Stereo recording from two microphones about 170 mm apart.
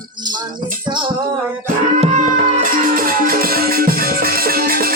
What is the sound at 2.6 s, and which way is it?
Music, 55° right (ahead or behind).